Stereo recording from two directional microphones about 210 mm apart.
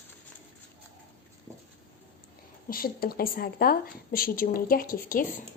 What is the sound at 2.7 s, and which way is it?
A woman's voice, 45° left (ahead or behind).